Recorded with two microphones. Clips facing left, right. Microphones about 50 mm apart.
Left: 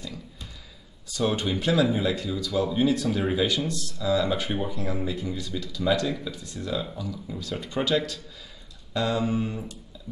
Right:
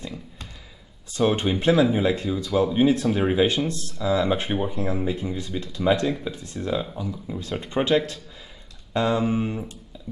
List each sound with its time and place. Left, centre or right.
1.1 s speech: right